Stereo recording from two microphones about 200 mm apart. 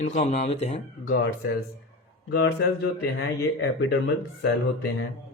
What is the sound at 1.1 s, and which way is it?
Speech, 55° left (ahead or behind).